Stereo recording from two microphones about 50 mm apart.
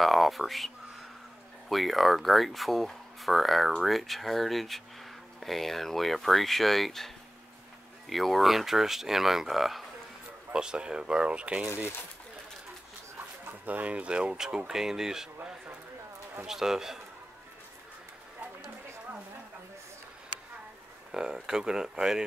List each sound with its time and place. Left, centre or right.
0.0 s speech: centre
1.7 s speech: centre
8.1 s speech: centre
10.5 s speech: centre
13.5 s speech: right; by 15.2 s centre
16.4 s speech: centre
21.1 s speech: centre